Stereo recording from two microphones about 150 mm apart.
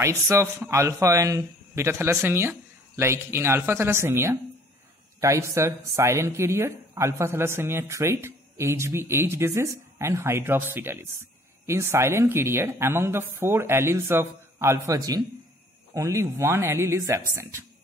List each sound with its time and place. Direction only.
0.0 s speech: 20° right (ahead or behind)